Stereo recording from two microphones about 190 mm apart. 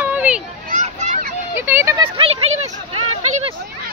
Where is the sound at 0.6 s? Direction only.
40° right (ahead or behind).